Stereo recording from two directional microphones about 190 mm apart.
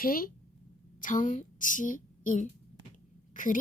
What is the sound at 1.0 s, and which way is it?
A woman's voice, 45° left (ahead or behind).